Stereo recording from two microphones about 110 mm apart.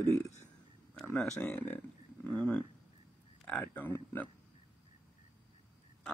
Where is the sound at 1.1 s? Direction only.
10° left (ahead or behind).